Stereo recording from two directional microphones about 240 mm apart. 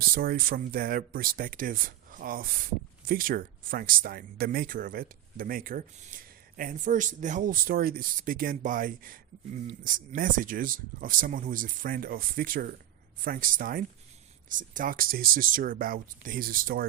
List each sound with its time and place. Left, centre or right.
0.0 s speech: right